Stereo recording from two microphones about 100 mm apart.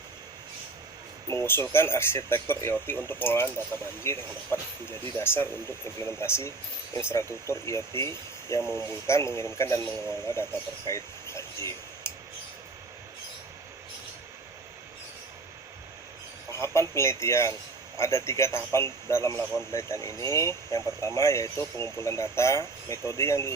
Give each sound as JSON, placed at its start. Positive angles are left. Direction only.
{"t": 1.3, "sound": "speech", "side_deg": 25}
{"t": 8.7, "sound": "speech", "side_deg": -35}
{"t": 9.0, "sound": "speech", "side_deg": 30}
{"t": 10.8, "sound": "a sound", "side_deg": 30}
{"t": 16.5, "sound": "speech", "side_deg": 30}